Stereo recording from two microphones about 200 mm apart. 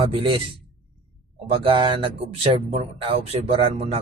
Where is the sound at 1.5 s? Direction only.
25° right (ahead or behind).